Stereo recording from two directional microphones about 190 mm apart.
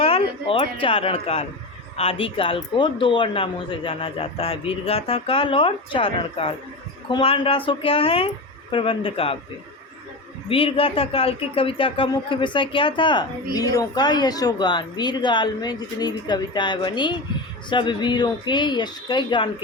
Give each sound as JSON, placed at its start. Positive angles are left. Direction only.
{"t": 0.0, "sound": "speech", "side_deg": 30}
{"t": 10.5, "sound": "speech", "side_deg": 30}